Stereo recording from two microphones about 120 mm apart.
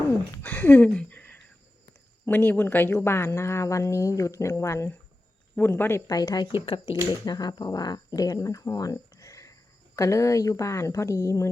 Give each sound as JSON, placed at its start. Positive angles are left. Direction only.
{"t": 0.4, "sound": "a sound", "side_deg": 15}
{"t": 2.2, "sound": "speech", "side_deg": 15}
{"t": 6.1, "sound": "speech", "side_deg": 35}
{"t": 6.7, "sound": "speech", "side_deg": 50}
{"t": 7.1, "sound": "speech", "side_deg": 35}